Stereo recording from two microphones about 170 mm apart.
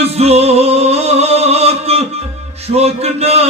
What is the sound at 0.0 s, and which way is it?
Music, 40° right (ahead or behind).